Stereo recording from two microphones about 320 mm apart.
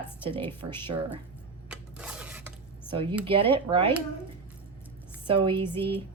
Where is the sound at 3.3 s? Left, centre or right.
Centre.